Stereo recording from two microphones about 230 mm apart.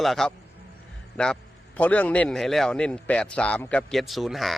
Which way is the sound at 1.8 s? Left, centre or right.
Centre.